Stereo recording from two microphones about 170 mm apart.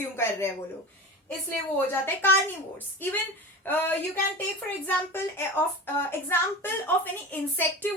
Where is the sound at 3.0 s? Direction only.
10° left (ahead or behind).